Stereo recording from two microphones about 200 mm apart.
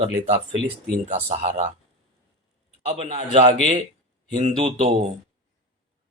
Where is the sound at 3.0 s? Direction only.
30° right (ahead or behind).